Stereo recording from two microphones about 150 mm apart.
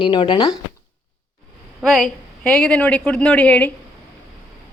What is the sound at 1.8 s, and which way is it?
A woman's voice, centre (ahead or behind).